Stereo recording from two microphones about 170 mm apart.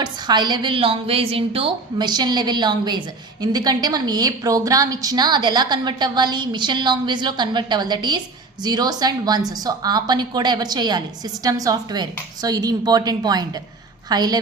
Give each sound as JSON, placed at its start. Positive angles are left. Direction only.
{"t": 0.0, "sound": "a woman's voice", "side_deg": -25}